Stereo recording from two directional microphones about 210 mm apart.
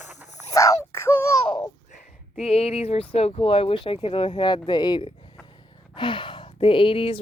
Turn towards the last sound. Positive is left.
turn(degrees=25)  # may be behind; listen again after turning